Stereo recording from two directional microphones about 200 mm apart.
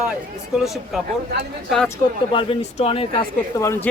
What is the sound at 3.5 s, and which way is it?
Speech, 15° left (ahead or behind).